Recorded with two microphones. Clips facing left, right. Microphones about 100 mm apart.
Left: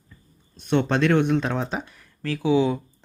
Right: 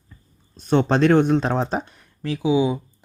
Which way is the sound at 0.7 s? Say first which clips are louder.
Right 4 dB; 35° right (ahead or behind).